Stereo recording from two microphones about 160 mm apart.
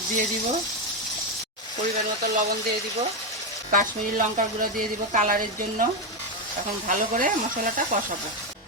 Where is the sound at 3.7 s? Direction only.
55° right (ahead or behind).